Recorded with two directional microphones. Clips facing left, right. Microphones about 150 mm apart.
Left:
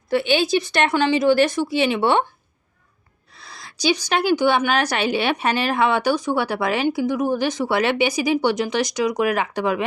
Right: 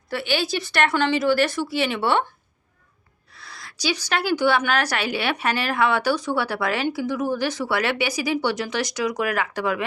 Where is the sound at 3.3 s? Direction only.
20° left (ahead or behind).